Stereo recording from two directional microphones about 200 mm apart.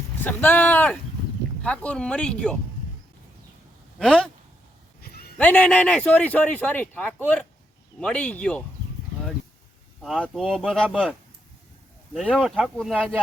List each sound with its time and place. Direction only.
0.3 s speech: 10° left (ahead or behind)
3.9 s speech: 5° left (ahead or behind)
4.9 s a sound: 50° left (ahead or behind)
5.4 s speech: 5° left (ahead or behind)
10.0 s speech: centre (ahead or behind)
12.1 s speech: centre (ahead or behind)